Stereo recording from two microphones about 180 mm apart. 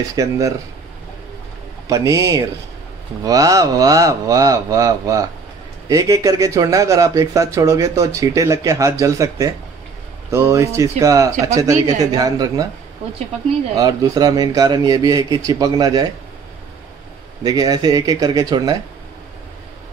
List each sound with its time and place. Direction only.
0.1 s speech: 20° right (ahead or behind)
1.9 s a man's voice: 20° right (ahead or behind)
13.7 s a man's voice: 20° right (ahead or behind)
17.4 s a man's voice: 20° right (ahead or behind)